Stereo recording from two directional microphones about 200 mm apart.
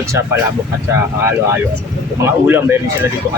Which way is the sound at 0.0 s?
15° right (ahead or behind).